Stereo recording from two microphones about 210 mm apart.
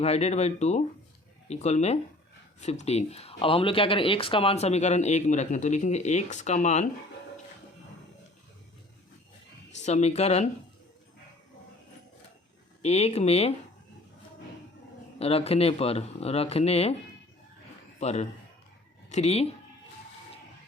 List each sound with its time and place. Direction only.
0.0 s speech: 30° left (ahead or behind)
9.7 s speech: 30° left (ahead or behind)
12.8 s speech: 30° left (ahead or behind)
15.2 s speech: 30° left (ahead or behind)
18.0 s speech: 30° left (ahead or behind)